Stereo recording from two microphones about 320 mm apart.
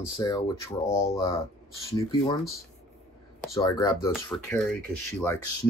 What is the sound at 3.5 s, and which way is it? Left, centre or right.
Speech, centre.